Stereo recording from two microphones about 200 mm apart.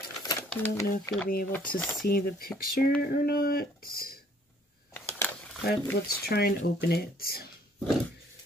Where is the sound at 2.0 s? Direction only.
50° left (ahead or behind).